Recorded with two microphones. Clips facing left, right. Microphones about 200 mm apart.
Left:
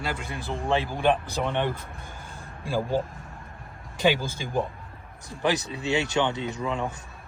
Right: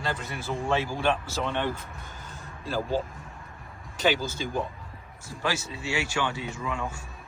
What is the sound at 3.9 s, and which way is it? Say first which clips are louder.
A man's voice: left 2 dB; 15° left (ahead or behind).